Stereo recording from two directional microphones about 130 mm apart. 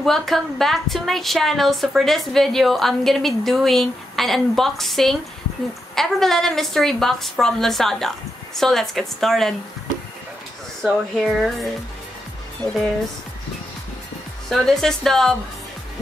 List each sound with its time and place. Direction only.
0.0 s a woman's voice: centre (ahead or behind)
10.8 s a woman's voice: centre (ahead or behind)
14.5 s a woman's voice: 5° left (ahead or behind)